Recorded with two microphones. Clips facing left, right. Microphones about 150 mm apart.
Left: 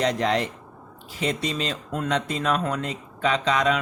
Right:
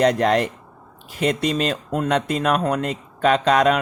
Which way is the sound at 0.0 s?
55° right (ahead or behind).